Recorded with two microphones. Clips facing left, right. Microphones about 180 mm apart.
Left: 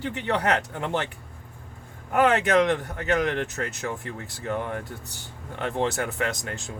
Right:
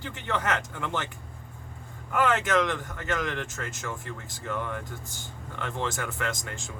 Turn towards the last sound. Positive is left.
turn(degrees=60)  # may be behind; listen again after turning